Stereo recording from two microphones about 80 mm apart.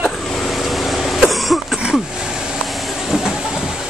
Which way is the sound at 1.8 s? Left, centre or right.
Centre.